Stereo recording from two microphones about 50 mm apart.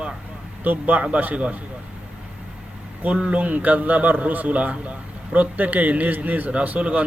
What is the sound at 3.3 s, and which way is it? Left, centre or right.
A man's voice, right.